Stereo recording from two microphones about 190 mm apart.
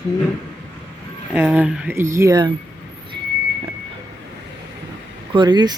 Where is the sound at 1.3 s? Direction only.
5° right (ahead or behind).